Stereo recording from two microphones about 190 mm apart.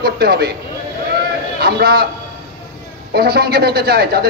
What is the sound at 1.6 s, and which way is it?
Speech, 55° right (ahead or behind).